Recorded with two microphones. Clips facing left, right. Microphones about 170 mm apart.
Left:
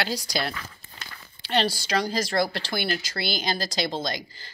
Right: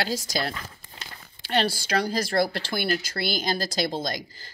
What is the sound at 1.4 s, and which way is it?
Speech, 50° right (ahead or behind).